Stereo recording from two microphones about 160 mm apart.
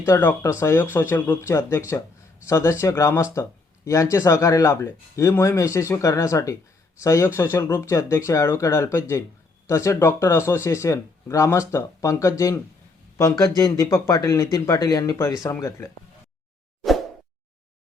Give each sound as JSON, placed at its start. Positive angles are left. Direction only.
{"t": 0.0, "sound": "speech", "side_deg": 15}